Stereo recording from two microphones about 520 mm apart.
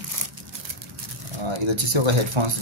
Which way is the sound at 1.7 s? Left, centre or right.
Right.